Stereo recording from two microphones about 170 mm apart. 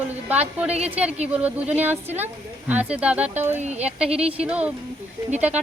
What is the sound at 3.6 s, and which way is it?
Speech, 40° right (ahead or behind).